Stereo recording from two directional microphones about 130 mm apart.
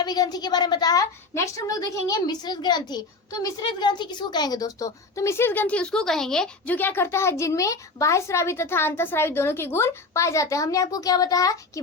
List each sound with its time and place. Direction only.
0.0 s a woman's voice: 30° left (ahead or behind)